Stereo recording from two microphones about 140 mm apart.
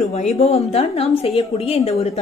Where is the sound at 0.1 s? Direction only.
50° left (ahead or behind).